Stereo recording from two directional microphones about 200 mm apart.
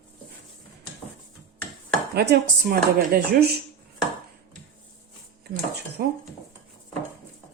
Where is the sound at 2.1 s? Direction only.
55° right (ahead or behind).